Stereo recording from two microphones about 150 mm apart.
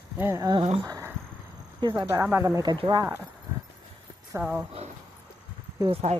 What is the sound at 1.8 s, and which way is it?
Speech, 30° right (ahead or behind).